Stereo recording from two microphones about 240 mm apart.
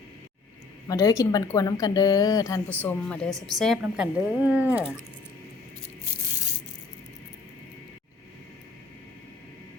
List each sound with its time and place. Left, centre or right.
0.9 s a woman's voice: centre